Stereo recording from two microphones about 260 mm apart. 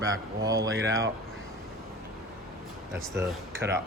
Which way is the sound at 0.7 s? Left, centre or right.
Right.